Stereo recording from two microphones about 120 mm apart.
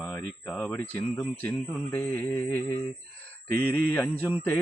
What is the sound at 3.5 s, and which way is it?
Speech, 15° left (ahead or behind).